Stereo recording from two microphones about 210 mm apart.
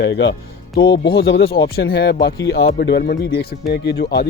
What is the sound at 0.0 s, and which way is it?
Speech, 55° left (ahead or behind).